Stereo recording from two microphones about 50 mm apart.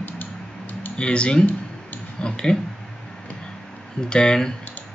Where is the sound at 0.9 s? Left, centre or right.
Left.